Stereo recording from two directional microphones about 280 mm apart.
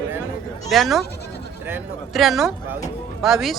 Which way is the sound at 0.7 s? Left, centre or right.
Centre.